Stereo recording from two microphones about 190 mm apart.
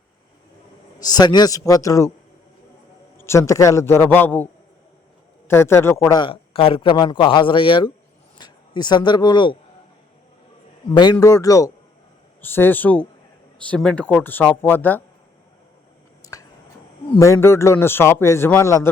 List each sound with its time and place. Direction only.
0.9 s a man's voice: 20° left (ahead or behind)
3.2 s speech: 15° left (ahead or behind)
5.5 s a man's voice: 15° left (ahead or behind)
10.9 s a man's voice: 20° left (ahead or behind)
16.2 s a sound: 20° left (ahead or behind)
17.1 s speech: 15° left (ahead or behind)